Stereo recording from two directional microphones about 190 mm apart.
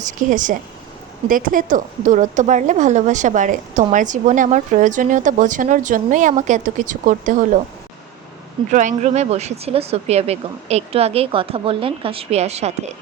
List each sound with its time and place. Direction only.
0.0 s a woman's voice: 45° right (ahead or behind)
8.7 s a woman's voice: 40° right (ahead or behind)